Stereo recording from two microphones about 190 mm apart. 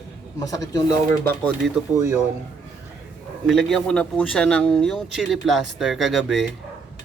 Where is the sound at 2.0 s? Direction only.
15° right (ahead or behind).